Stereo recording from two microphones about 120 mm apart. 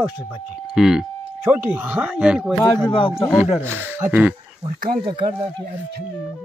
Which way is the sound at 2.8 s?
45° left (ahead or behind).